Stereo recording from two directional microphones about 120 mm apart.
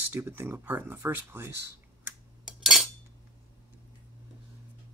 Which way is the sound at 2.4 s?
5° right (ahead or behind).